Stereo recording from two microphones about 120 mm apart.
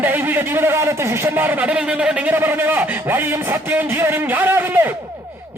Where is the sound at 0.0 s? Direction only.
15° right (ahead or behind).